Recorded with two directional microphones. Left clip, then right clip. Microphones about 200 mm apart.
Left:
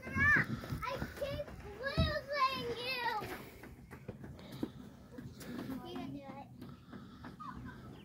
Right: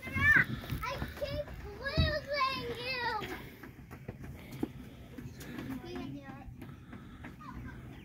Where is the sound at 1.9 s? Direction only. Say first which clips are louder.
Right 3 dB; 60° left (ahead or behind).